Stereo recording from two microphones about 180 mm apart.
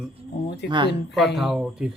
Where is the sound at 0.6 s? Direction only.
70° left (ahead or behind).